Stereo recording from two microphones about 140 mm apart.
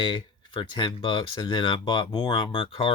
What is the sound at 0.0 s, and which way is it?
Speech, 35° left (ahead or behind).